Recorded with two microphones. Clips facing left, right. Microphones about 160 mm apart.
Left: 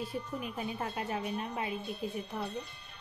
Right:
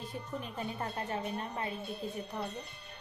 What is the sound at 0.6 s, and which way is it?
Speech, 10° left (ahead or behind).